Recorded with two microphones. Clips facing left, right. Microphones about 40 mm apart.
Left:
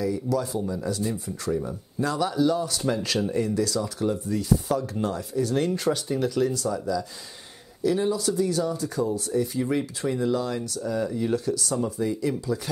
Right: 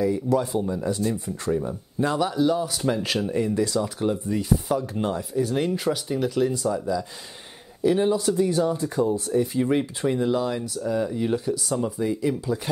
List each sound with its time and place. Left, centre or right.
0.0 s speech: right
1.5 s speech: centre
2.2 s speech: centre
7.8 s speech: right